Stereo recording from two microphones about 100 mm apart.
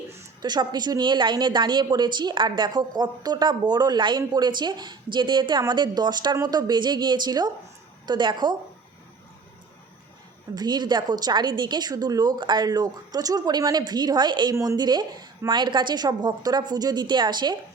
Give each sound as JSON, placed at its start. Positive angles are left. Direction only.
{"t": 0.4, "sound": "a woman's voice", "side_deg": -45}
{"t": 10.5, "sound": "a woman's voice", "side_deg": -45}
{"t": 14.5, "sound": "speech", "side_deg": -30}
{"t": 14.8, "sound": "a woman's voice", "side_deg": -45}